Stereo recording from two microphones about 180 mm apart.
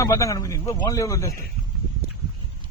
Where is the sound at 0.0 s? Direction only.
15° left (ahead or behind).